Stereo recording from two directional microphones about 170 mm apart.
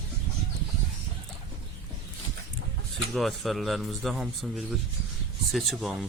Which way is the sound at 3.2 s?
Centre (ahead or behind).